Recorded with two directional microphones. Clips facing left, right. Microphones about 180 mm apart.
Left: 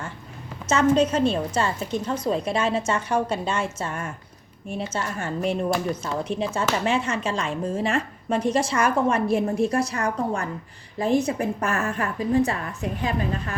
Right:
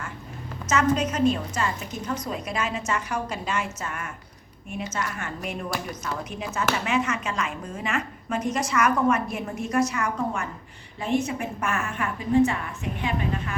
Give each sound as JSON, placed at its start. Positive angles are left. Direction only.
{"t": 0.7, "sound": "a woman's voice", "side_deg": 30}